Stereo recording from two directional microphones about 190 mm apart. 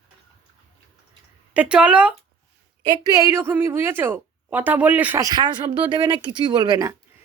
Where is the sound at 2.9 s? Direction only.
20° right (ahead or behind).